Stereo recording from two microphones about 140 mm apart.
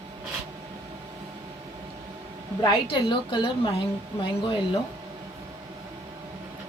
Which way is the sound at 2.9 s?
35° left (ahead or behind).